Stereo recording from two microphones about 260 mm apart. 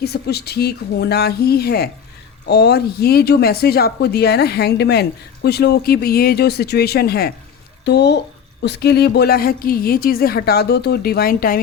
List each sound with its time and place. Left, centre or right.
0.0 s speech: left